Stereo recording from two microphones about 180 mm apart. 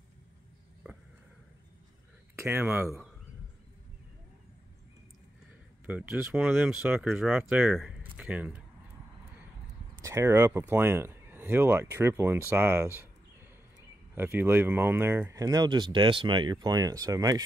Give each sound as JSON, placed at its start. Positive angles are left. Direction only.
{"t": 2.3, "sound": "speech", "side_deg": -10}
{"t": 5.9, "sound": "speech", "side_deg": -5}
{"t": 10.0, "sound": "speech", "side_deg": -15}